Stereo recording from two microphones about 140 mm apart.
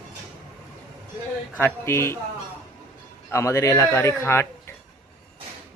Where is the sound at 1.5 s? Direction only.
15° left (ahead or behind).